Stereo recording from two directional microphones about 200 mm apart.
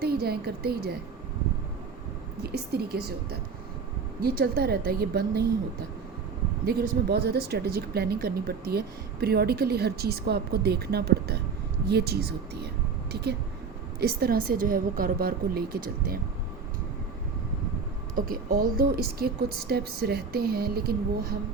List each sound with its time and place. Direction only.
0.0 s speech: 50° right (ahead or behind)
2.4 s speech: 50° right (ahead or behind)
6.7 s speech: 50° right (ahead or behind)
18.3 s speech: 45° right (ahead or behind)